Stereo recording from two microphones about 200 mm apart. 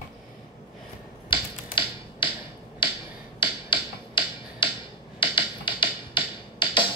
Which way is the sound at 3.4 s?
25° left (ahead or behind).